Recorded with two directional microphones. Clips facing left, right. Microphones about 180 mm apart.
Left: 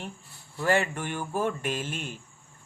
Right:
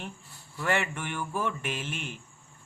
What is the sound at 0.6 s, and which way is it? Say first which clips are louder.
A man's voice: left 4 dB; 35° left (ahead or behind).